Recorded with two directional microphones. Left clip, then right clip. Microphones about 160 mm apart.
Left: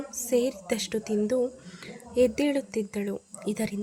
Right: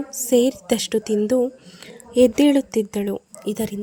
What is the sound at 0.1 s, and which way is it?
Speech, 40° right (ahead or behind).